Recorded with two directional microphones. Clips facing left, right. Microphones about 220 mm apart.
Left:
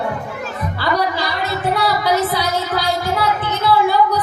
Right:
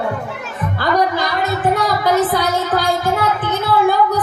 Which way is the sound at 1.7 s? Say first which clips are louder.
Left 1 dB; 50° right (ahead or behind).